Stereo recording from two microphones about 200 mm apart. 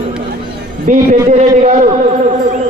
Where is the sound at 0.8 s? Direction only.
40° right (ahead or behind).